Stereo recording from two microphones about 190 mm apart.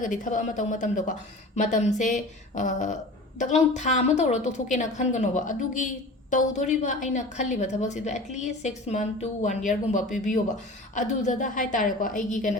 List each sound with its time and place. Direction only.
0.0 s a woman's voice: 40° left (ahead or behind)